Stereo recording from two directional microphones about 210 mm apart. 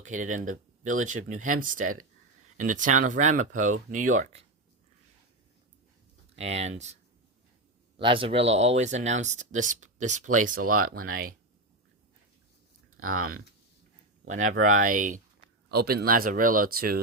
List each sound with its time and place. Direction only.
0.0 s speech: 35° right (ahead or behind)
6.3 s speech: 30° right (ahead or behind)
7.9 s speech: 25° right (ahead or behind); by 11.3 s 40° right (ahead or behind)
13.0 s speech: 85° right
14.3 s speech: 35° right (ahead or behind)
15.7 s speech: 50° right (ahead or behind)